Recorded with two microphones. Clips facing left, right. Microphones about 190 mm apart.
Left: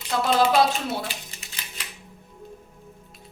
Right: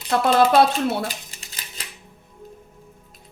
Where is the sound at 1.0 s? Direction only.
40° right (ahead or behind).